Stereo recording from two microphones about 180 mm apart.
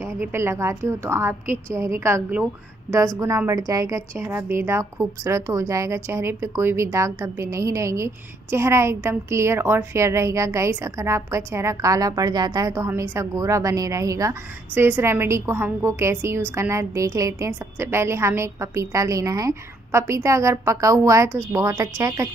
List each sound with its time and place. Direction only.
0.0 s a woman's voice: 15° right (ahead or behind)